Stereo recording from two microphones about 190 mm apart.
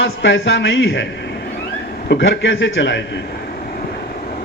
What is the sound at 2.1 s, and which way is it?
Speech, 65° left (ahead or behind).